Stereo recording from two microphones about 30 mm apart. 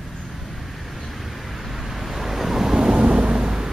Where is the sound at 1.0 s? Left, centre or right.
Centre.